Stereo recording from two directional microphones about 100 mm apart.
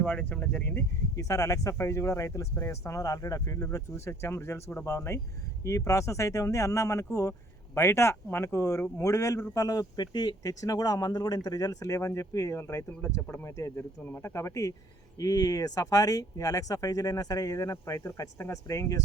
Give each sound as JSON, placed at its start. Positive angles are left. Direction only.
{"t": 0.0, "sound": "speech", "side_deg": 15}
{"t": 1.1, "sound": "speech", "side_deg": 35}